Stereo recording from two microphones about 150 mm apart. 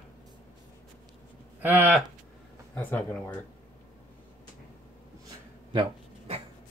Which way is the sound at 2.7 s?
10° left (ahead or behind).